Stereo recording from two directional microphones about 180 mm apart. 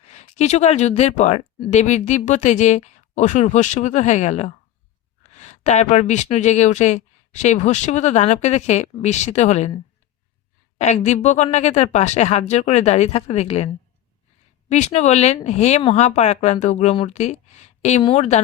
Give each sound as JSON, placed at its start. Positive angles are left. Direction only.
{"t": 0.1, "sound": "speech", "side_deg": 40}
{"t": 10.8, "sound": "speech", "side_deg": 40}
{"t": 14.7, "sound": "speech", "side_deg": 40}